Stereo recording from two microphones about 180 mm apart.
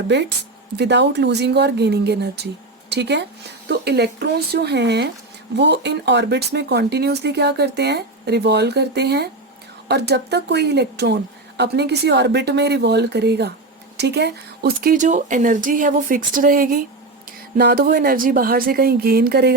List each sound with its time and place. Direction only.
0.1 s speech: 70° right (ahead or behind); by 16.6 s 50° right (ahead or behind)
17.6 s speech: 65° right (ahead or behind)